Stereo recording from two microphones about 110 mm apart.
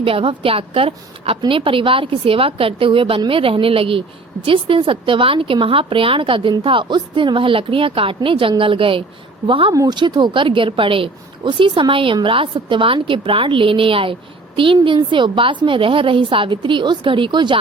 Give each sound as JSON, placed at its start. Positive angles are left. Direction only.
{"t": 0.0, "sound": "a woman's voice", "side_deg": -55}
{"t": 9.7, "sound": "a woman's voice", "side_deg": -40}